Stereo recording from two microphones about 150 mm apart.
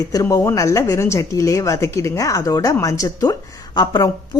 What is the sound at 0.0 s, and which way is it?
A woman's voice, 20° left (ahead or behind).